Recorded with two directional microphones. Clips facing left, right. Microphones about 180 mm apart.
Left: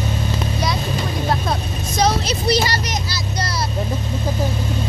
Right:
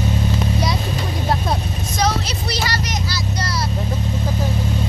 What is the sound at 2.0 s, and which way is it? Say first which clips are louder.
Vehicle: left 3 dB; 20° left (ahead or behind).